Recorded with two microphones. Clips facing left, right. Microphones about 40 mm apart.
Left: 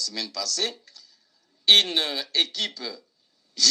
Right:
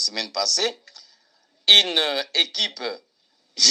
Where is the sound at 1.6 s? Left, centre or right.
Right.